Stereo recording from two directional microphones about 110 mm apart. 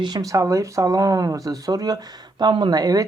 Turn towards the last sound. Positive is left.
turn(degrees=-35)  # may be behind; listen again after turning